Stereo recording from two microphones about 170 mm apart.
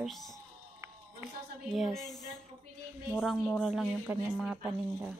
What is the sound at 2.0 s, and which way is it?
Speech, 20° left (ahead or behind).